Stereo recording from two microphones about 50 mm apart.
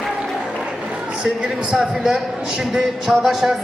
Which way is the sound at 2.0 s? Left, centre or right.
Centre.